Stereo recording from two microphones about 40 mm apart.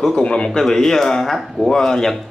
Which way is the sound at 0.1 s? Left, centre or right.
Left.